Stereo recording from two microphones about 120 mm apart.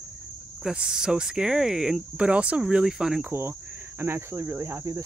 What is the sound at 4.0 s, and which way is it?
Cricket, 20° right (ahead or behind).